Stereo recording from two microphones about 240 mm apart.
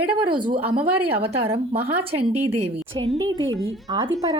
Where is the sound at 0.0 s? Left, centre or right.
Centre.